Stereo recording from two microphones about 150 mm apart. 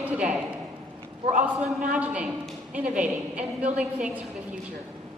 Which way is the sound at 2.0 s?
5° right (ahead or behind).